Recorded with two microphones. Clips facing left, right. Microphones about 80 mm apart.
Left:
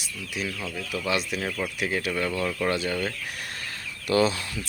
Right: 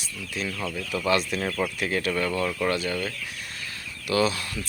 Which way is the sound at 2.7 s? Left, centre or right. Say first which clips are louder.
Even; left.